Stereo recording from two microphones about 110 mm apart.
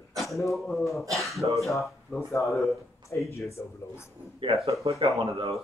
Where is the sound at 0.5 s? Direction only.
Centre (ahead or behind).